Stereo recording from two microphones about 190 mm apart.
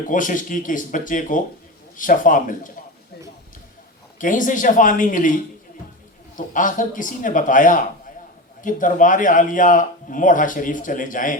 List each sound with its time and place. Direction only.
0.1 s a man's voice: 45° left (ahead or behind)
4.2 s a man's voice: 45° left (ahead or behind)
6.3 s a man's voice: 45° left (ahead or behind)